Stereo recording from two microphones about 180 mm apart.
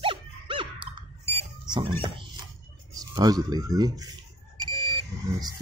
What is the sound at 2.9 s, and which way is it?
Speech, 20° right (ahead or behind).